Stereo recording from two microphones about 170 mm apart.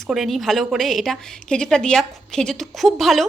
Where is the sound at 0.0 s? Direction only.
Centre (ahead or behind).